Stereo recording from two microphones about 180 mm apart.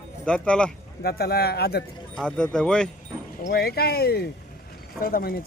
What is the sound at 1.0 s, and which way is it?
Speech, 60° left (ahead or behind).